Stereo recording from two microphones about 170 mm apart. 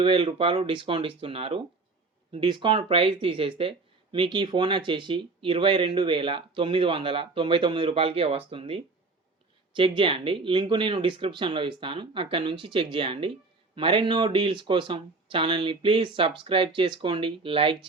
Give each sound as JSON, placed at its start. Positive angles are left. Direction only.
{"t": 0.0, "sound": "speech", "side_deg": -30}